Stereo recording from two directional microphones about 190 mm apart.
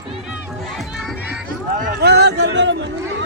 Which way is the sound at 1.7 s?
60° right (ahead or behind).